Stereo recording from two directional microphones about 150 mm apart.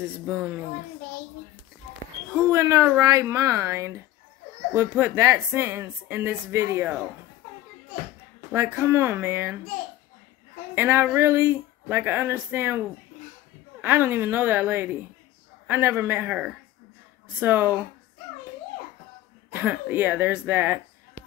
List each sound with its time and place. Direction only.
0.3 s a woman's voice: 10° right (ahead or behind)
2.5 s a woman's voice: 20° right (ahead or behind)
8.5 s a woman's voice: 15° right (ahead or behind)
10.7 s a woman's voice: 15° right (ahead or behind)
19.5 s a woman's voice: 10° right (ahead or behind)